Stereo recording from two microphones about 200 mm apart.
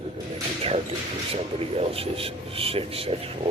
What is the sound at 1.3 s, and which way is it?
A man's voice, 30° right (ahead or behind).